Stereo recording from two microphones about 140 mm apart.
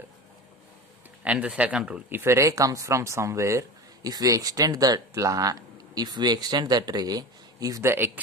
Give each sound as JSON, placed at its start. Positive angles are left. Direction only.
{"t": 1.2, "sound": "speech", "side_deg": -10}